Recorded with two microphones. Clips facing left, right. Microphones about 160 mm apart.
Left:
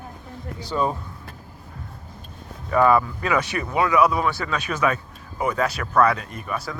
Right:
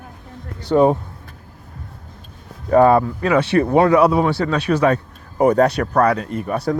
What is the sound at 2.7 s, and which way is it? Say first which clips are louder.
Speech: right 5 dB; 35° right (ahead or behind).